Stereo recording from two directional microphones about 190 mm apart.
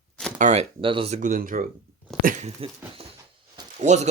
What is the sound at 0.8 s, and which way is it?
Speech, 30° right (ahead or behind).